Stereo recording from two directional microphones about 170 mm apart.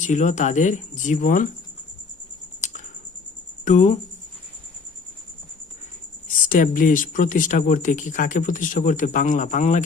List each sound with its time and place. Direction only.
0.0 s speech: 45° left (ahead or behind)
2.6 s a sound: 45° left (ahead or behind)
3.6 s speech: 45° left (ahead or behind)
6.5 s speech: 50° left (ahead or behind)